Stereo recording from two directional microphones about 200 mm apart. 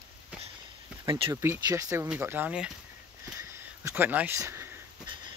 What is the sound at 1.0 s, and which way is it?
Speech, 25° right (ahead or behind).